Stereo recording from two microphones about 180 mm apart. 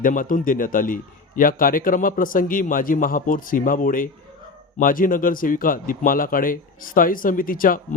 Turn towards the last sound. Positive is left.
turn(degrees=50)  # may be behind; listen again after turning